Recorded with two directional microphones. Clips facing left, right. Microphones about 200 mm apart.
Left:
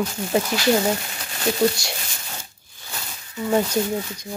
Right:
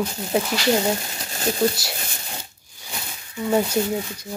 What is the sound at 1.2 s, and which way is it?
Speech, 35° right (ahead or behind).